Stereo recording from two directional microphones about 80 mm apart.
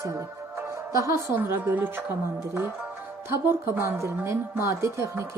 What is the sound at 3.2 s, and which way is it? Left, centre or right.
Speech, right.